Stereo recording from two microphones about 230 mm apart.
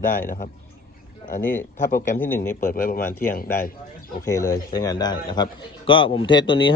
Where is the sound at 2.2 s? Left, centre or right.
Centre.